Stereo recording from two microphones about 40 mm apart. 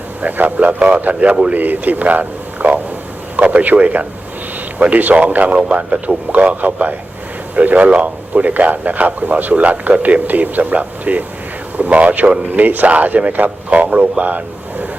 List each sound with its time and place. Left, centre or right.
0.2 s a man's voice: right
1.5 s a man's voice: right
12.5 s speech: right